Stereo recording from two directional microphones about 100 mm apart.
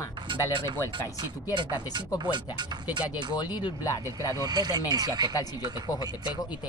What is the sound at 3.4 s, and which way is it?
Speech, 45° left (ahead or behind).